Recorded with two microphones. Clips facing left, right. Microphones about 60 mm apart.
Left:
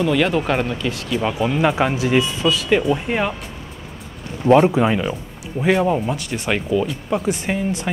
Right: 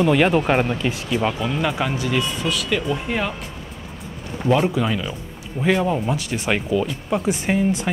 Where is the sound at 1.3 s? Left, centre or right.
Centre.